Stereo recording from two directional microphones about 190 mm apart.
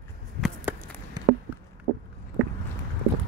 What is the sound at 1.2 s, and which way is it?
Chop, 20° right (ahead or behind).